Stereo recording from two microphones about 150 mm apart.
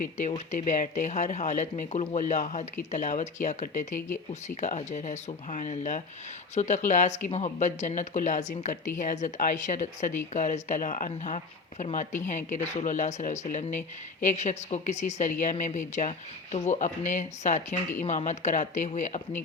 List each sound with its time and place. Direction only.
0.0 s speech: 50° left (ahead or behind)